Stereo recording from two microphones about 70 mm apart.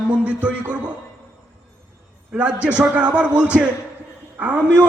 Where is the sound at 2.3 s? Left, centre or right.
Right.